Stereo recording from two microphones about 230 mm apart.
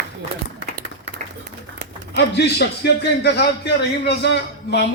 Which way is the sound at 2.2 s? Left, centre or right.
Left.